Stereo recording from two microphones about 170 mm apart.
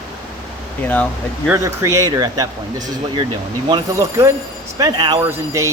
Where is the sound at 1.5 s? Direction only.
15° right (ahead or behind).